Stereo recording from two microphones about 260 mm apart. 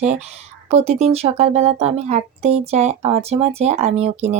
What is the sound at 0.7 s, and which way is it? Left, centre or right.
Speech, right.